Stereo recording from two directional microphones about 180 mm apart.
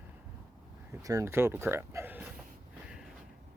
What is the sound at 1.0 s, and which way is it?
Speech, 15° right (ahead or behind).